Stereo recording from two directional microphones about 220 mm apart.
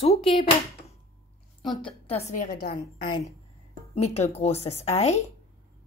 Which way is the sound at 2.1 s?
30° left (ahead or behind).